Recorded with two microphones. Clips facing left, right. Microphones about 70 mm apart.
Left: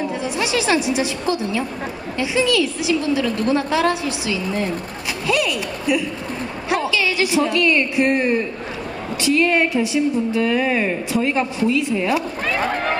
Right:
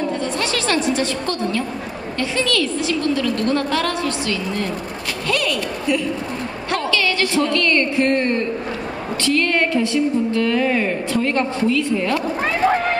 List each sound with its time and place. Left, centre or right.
0.0 s a woman's voice: centre